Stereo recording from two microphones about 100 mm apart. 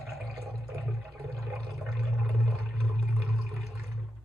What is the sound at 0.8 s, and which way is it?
Toilet flush, 5° left (ahead or behind).